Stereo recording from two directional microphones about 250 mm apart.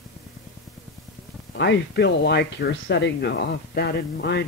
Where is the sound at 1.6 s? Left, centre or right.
Left.